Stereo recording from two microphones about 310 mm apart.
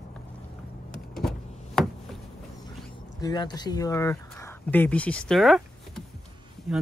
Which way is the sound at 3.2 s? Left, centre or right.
Centre.